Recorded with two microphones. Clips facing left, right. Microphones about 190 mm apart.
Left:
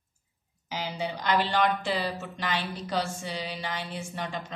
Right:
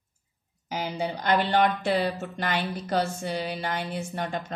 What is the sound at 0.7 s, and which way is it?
A woman's voice, 45° right (ahead or behind).